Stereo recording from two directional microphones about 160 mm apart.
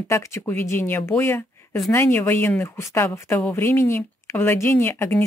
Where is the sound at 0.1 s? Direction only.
15° left (ahead or behind).